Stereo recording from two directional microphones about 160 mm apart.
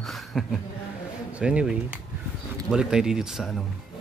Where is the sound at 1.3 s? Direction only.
5° right (ahead or behind).